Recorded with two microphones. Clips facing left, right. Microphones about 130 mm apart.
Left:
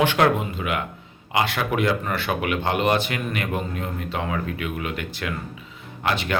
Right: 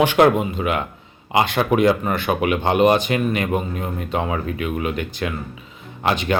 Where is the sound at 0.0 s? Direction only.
20° right (ahead or behind).